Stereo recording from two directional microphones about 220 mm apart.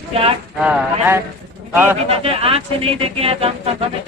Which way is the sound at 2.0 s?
25° right (ahead or behind).